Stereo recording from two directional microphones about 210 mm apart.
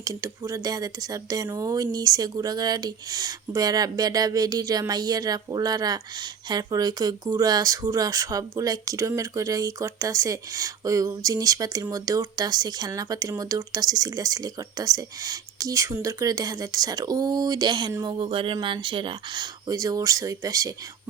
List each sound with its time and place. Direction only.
0.0 s speech: 15° right (ahead or behind)